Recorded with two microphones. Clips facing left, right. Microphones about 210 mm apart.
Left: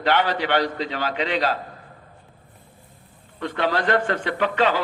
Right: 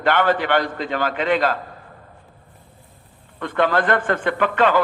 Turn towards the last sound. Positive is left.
turn(degrees=-50)  # may be behind; listen again after turning